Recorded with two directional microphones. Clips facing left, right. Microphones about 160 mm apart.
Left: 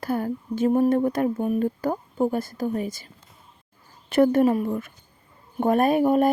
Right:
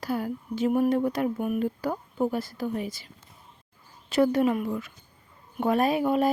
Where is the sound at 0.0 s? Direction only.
50° left (ahead or behind).